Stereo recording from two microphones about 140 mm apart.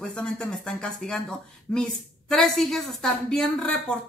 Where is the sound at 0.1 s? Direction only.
5° left (ahead or behind).